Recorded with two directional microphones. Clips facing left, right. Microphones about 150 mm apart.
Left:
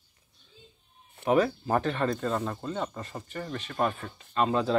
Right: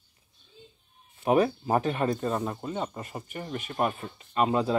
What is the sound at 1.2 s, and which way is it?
Speech, 15° right (ahead or behind).